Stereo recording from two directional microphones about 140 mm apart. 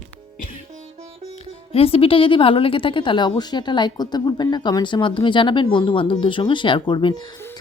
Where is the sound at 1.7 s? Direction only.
45° left (ahead or behind).